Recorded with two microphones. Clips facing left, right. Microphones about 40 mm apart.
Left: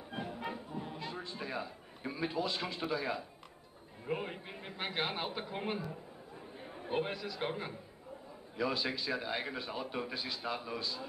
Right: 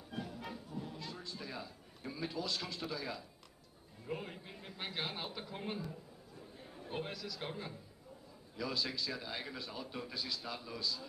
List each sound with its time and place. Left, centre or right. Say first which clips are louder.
0.1 s music: left 4 dB; left
4.0 s a man's voice: left 5 dB; left